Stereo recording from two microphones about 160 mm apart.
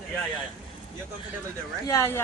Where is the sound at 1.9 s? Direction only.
15° left (ahead or behind).